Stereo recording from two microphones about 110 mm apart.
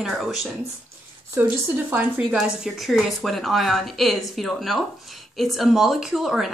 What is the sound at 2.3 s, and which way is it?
Speech, centre (ahead or behind).